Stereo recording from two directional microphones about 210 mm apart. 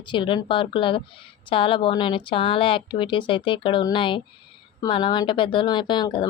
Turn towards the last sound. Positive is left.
turn(degrees=20)  # may be behind; listen again after turning